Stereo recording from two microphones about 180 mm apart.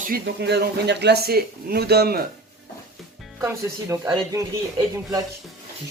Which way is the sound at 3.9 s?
20° right (ahead or behind).